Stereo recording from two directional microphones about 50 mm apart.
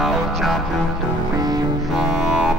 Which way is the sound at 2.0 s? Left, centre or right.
Centre.